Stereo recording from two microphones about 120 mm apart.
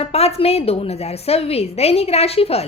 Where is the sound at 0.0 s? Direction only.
60° left (ahead or behind).